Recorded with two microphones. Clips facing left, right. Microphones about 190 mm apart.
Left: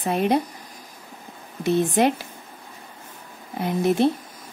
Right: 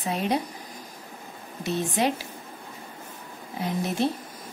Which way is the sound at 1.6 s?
55° left (ahead or behind).